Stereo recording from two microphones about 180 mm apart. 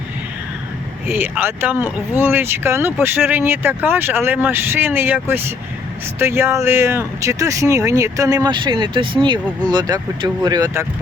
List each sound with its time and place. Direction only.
1.0 s speech: 10° right (ahead or behind)